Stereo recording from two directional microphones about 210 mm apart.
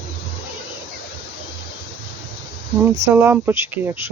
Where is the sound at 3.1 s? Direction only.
10° right (ahead or behind).